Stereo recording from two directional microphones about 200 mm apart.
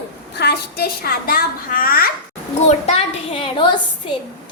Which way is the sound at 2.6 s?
30° left (ahead or behind).